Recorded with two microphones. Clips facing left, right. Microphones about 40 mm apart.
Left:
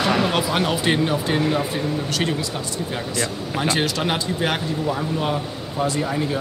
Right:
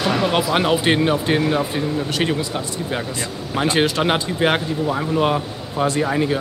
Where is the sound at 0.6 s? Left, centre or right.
Centre.